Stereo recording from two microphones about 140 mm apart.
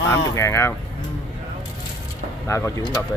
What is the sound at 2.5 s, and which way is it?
Speech, 20° left (ahead or behind).